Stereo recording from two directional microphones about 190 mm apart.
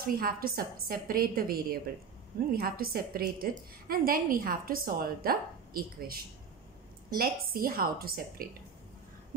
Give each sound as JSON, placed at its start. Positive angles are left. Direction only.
{"t": 0.0, "sound": "speech", "side_deg": -50}